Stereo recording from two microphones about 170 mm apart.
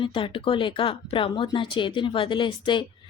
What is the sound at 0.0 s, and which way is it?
A woman's voice, 30° left (ahead or behind).